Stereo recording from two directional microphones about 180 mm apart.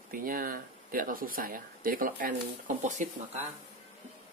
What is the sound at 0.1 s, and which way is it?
Speech, 50° right (ahead or behind).